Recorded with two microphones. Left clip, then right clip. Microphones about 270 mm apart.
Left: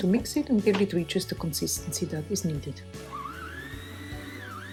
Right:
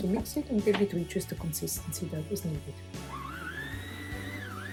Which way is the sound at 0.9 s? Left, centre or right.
Centre.